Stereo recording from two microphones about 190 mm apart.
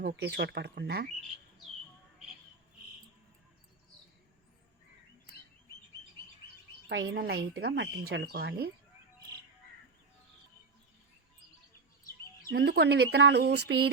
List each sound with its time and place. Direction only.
0.0 s speech: 60° right (ahead or behind)
6.8 s speech: 75° right (ahead or behind)
7.2 s speech: 60° right (ahead or behind)
12.5 s speech: 55° right (ahead or behind)